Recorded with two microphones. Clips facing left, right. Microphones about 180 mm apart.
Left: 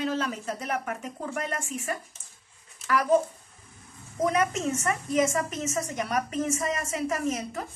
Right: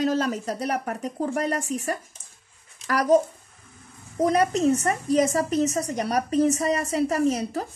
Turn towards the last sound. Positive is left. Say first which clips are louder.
# right 6 dB
turn(degrees=-35)  # may be behind; listen again after turning